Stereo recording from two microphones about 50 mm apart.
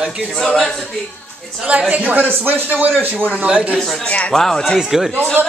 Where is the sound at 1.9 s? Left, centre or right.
Right.